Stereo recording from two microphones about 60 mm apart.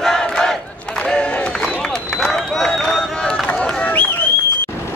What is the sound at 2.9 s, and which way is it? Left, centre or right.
Run, centre.